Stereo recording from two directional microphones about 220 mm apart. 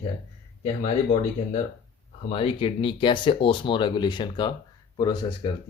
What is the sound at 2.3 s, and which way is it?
Speech, 25° left (ahead or behind).